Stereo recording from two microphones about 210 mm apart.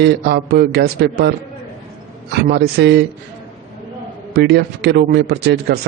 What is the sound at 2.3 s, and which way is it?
Speech, 50° right (ahead or behind).